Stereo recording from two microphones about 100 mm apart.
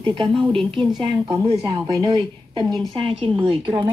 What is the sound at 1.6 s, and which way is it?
Speech, 35° right (ahead or behind).